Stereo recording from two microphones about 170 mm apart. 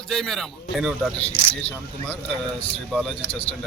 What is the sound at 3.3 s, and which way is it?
Speech, 35° left (ahead or behind).